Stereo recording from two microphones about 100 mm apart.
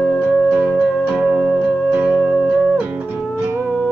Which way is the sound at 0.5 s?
15° right (ahead or behind).